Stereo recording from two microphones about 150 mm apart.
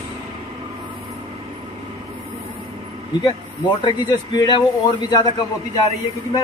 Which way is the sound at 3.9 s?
30° left (ahead or behind).